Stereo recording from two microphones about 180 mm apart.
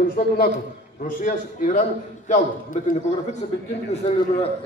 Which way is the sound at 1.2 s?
45° left (ahead or behind).